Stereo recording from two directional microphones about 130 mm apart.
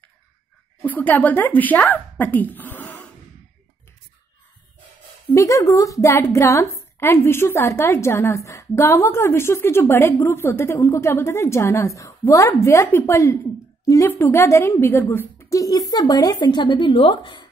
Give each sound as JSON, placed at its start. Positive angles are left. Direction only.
{"t": 0.8, "sound": "a woman's voice", "side_deg": 15}
{"t": 5.3, "sound": "a woman's voice", "side_deg": 25}